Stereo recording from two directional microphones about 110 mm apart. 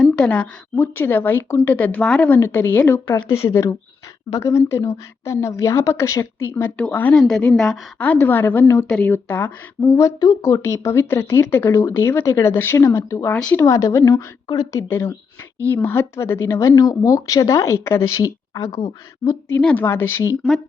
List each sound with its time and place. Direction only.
0.0 s a sound: 10° left (ahead or behind)
0.8 s speech: 20° left (ahead or behind)
2.4 s speech: 20° left (ahead or behind)
4.4 s a woman's voice: 25° left (ahead or behind)
14.7 s speech: 25° left (ahead or behind)
18.2 s speech: 35° left (ahead or behind)
19.6 s speech: 20° left (ahead or behind)